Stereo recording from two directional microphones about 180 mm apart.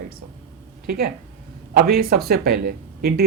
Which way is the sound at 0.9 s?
60° right (ahead or behind).